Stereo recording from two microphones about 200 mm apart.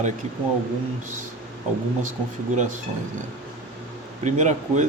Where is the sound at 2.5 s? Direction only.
35° right (ahead or behind).